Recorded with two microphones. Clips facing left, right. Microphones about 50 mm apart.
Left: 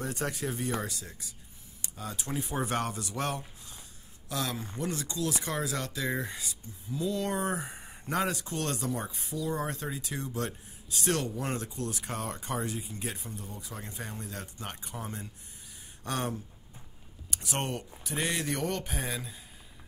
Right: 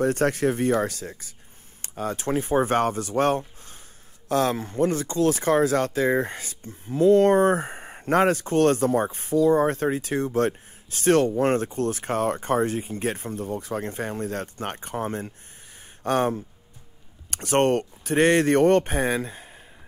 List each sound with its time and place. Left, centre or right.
0.0 s speech: right
17.3 s speech: right